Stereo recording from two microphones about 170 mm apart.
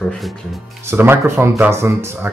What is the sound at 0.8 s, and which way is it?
Speech, 15° right (ahead or behind).